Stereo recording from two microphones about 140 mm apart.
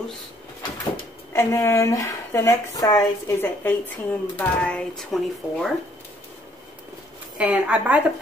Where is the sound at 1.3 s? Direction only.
20° left (ahead or behind); by 5.7 s centre (ahead or behind).